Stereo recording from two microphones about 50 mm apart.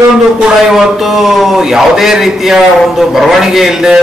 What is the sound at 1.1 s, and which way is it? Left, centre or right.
A man's voice, centre.